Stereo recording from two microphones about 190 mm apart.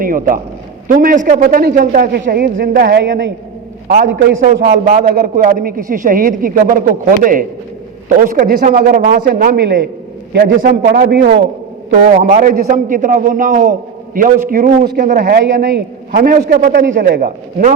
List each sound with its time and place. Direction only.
0.0 s a man's voice: 45° right (ahead or behind); by 3.3 s 65° right (ahead or behind)
4.4 s a man's voice: 45° right (ahead or behind)
12.3 s a man's voice: 45° right (ahead or behind)